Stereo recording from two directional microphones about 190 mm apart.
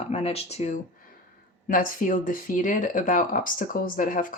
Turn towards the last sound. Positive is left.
turn(degrees=45)  # may be behind; listen again after turning